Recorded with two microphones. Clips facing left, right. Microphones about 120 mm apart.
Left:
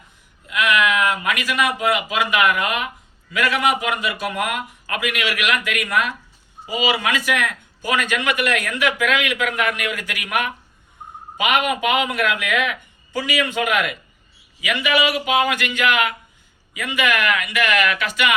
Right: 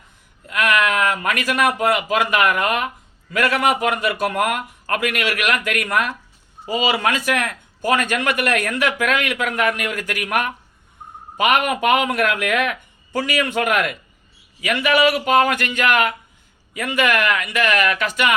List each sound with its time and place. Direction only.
0.4 s a man's voice: 45° right (ahead or behind)